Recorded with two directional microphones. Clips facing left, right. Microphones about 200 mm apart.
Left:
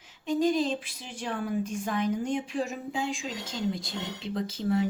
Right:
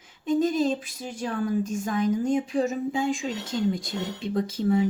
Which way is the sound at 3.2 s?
70° right (ahead or behind).